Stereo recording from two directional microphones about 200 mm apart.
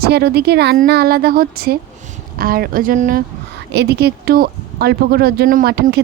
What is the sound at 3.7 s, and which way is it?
Speech, 55° right (ahead or behind).